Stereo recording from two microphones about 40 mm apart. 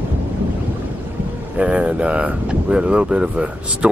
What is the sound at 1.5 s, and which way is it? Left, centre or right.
Speech, right.